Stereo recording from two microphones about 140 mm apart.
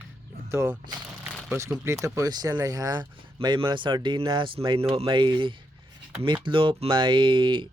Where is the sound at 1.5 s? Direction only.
20° right (ahead or behind).